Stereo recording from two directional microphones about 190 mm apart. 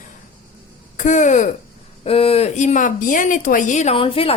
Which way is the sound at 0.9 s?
40° left (ahead or behind).